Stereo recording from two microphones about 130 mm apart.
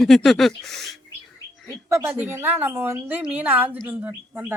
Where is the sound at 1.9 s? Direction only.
20° right (ahead or behind).